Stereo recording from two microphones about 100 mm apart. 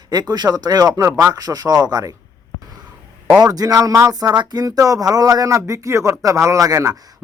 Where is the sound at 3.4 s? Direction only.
40° right (ahead or behind).